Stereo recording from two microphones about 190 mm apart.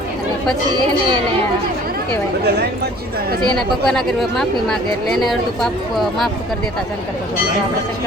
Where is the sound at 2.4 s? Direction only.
60° right (ahead or behind).